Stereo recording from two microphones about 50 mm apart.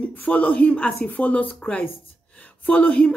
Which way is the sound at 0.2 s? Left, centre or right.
Left.